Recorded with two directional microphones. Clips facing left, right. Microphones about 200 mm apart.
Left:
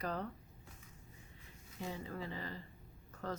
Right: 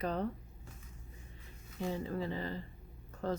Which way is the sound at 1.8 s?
30° right (ahead or behind).